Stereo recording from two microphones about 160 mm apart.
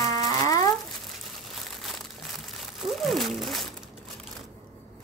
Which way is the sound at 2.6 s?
Centre (ahead or behind).